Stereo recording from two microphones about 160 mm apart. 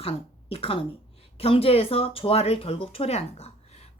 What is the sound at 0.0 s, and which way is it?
A woman's voice, 35° left (ahead or behind).